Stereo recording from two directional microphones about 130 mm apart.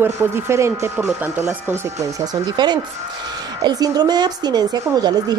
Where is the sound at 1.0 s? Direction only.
10° right (ahead or behind).